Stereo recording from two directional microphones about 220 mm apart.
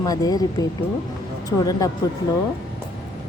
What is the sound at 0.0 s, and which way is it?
Speech, 15° left (ahead or behind).